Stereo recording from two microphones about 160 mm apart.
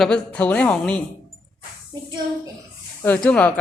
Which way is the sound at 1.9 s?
25° right (ahead or behind).